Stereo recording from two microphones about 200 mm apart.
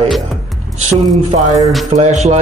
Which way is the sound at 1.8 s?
35° right (ahead or behind).